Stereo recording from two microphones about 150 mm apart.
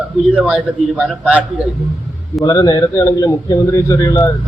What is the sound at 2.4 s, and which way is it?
A man's voice, 25° left (ahead or behind).